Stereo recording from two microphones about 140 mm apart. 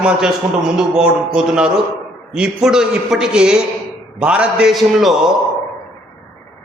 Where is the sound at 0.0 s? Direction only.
5° right (ahead or behind).